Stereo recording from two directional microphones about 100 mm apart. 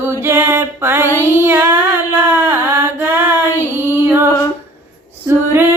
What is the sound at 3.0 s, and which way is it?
Female singing, 20° right (ahead or behind).